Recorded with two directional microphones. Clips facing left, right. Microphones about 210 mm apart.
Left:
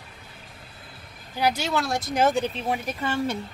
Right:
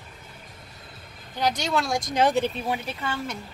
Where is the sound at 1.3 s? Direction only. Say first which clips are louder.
Left 1 dB; 5° left (ahead or behind).